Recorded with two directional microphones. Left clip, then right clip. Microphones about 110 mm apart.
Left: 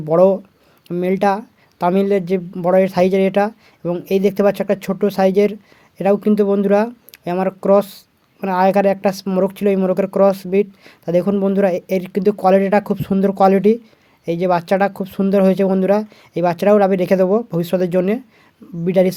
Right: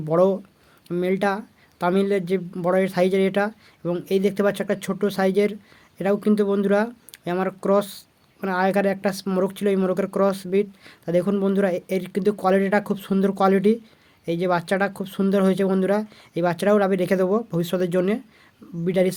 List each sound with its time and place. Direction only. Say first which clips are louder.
0.0 s speech: left 7 dB; 35° left (ahead or behind)